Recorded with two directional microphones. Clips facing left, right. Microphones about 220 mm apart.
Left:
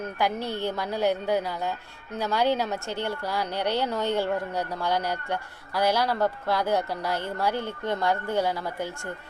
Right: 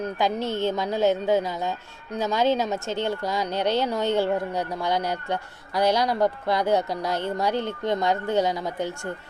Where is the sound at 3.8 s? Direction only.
15° right (ahead or behind).